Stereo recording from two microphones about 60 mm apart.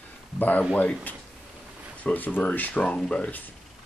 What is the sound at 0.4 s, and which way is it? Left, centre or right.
Speech, left.